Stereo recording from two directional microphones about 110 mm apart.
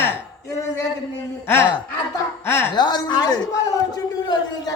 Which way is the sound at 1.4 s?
20° left (ahead or behind).